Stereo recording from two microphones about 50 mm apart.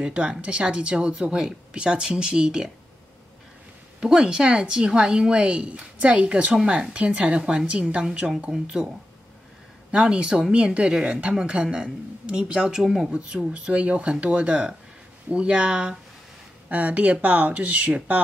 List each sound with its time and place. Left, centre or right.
0.0 s a woman's voice: centre
4.0 s a woman's voice: centre
13.1 s a woman's voice: right